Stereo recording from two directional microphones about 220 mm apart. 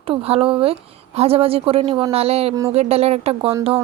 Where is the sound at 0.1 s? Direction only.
25° right (ahead or behind).